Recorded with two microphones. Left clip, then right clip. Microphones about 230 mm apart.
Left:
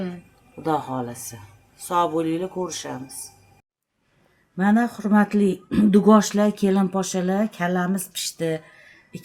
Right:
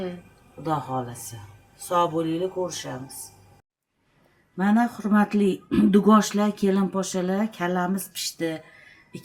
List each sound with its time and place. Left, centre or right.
0.6 s speech: left
4.5 s speech: left